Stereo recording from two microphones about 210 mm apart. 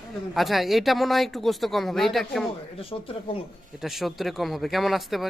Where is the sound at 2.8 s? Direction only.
25° left (ahead or behind).